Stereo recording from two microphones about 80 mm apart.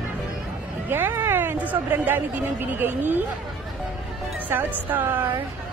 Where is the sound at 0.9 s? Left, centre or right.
Right.